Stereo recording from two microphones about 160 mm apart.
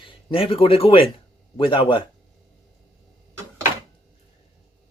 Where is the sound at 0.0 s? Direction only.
35° left (ahead or behind).